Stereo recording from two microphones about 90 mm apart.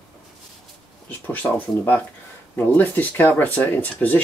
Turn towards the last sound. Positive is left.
turn(degrees=20)  # may be behind; listen again after turning